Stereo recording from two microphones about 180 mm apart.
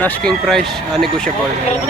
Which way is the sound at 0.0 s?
5° left (ahead or behind).